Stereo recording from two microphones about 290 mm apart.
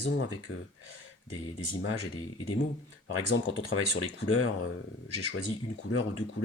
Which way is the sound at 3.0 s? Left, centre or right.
Left.